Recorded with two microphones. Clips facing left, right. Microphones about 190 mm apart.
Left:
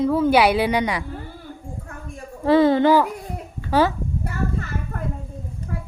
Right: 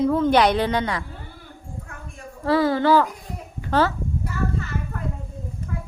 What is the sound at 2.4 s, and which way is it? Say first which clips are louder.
Speech: left 4 dB; 20° left (ahead or behind).